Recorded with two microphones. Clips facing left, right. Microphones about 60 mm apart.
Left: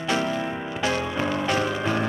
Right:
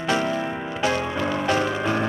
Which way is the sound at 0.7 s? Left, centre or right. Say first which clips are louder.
Right 2 dB; right.